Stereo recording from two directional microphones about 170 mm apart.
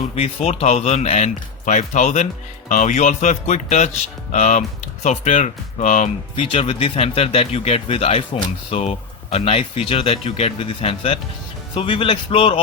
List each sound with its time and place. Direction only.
0.2 s speech: 40° left (ahead or behind)
6.3 s speech: 35° left (ahead or behind)